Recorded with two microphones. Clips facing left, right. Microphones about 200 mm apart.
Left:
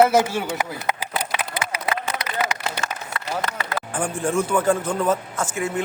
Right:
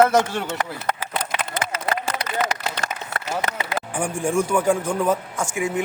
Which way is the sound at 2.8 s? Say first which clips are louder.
Right 2 dB; 35° right (ahead or behind).